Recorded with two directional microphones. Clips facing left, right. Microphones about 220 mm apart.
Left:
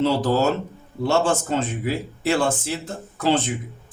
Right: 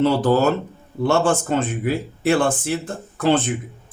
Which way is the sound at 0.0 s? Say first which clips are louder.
Right 3 dB; 55° right (ahead or behind).